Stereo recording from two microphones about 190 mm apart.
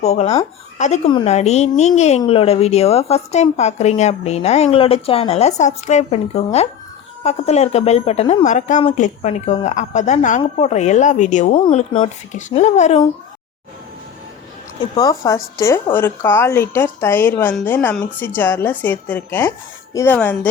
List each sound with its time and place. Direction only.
0.0 s speech: 35° left (ahead or behind)
14.9 s speech: 20° left (ahead or behind)